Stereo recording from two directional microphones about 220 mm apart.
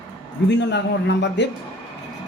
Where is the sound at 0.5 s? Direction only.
50° left (ahead or behind).